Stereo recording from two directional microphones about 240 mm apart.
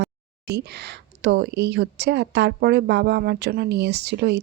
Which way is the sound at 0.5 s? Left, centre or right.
Right.